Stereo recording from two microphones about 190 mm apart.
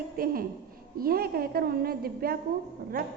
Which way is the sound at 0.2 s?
50° right (ahead or behind).